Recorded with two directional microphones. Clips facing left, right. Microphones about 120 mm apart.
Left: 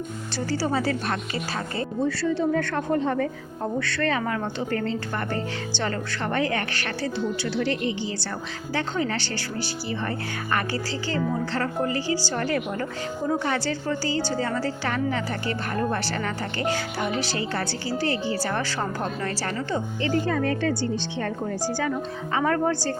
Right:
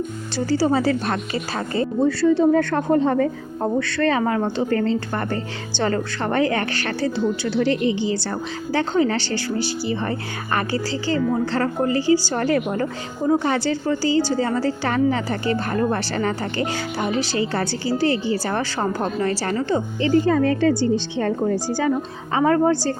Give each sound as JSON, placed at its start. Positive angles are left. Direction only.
{"t": 1.0, "sound": "a woman's voice", "side_deg": -35}
{"t": 14.2, "sound": "a woman's voice", "side_deg": 45}
{"t": 14.4, "sound": "a woman's voice", "side_deg": -30}